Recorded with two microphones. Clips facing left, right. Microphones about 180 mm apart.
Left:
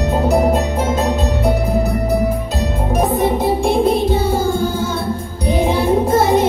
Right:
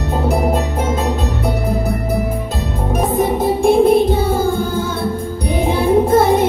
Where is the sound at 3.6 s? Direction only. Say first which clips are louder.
Right 4 dB; 50° right (ahead or behind).